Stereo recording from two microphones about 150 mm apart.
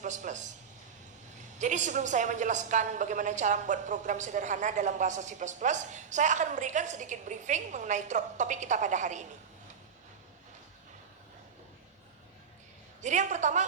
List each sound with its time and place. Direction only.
0.0 s a woman's voice: 55° right (ahead or behind)
1.5 s a woman's voice: 55° right (ahead or behind)
13.0 s a woman's voice: 55° right (ahead or behind)